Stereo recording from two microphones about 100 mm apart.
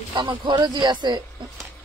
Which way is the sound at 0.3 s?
50° right (ahead or behind).